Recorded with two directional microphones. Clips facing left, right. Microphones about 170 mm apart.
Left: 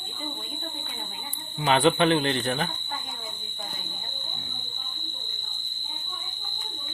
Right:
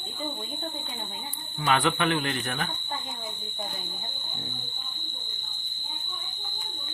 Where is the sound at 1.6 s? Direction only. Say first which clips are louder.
Left 4 dB; 25° left (ahead or behind).